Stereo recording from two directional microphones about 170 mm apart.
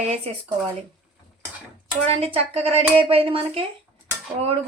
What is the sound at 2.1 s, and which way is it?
Speech, 35° right (ahead or behind).